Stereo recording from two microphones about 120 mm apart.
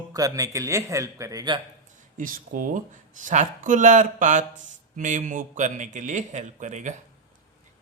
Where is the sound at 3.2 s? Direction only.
90° right.